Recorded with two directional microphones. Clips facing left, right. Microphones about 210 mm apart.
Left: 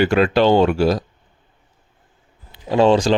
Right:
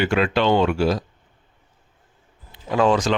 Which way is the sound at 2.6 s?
30° left (ahead or behind).